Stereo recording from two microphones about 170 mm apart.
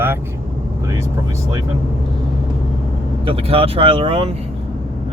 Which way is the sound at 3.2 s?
35° right (ahead or behind).